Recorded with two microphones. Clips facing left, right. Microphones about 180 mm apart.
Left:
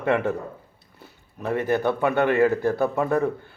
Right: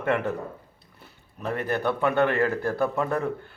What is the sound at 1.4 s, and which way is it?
A man's voice, 20° left (ahead or behind).